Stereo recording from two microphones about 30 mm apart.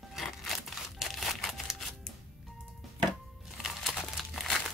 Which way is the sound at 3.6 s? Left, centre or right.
Centre.